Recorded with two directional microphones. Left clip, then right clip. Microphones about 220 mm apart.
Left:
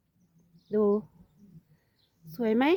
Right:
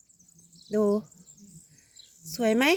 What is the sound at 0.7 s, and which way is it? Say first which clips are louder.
Speech: even; 20° right (ahead or behind).